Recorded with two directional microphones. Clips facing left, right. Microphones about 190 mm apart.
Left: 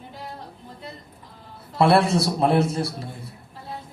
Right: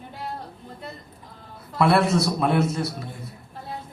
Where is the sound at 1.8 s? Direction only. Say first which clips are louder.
Left 1 dB; 30° left (ahead or behind).